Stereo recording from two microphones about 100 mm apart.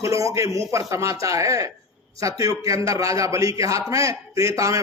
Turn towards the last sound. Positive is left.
turn(degrees=-30)  # may be behind; listen again after turning